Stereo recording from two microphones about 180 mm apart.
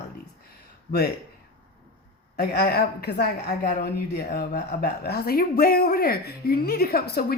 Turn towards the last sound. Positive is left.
turn(degrees=60)  # may be behind; listen again after turning